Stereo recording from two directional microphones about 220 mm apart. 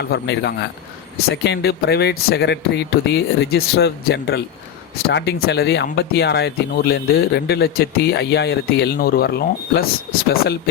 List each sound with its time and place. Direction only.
0.0 s speech: 50° left (ahead or behind)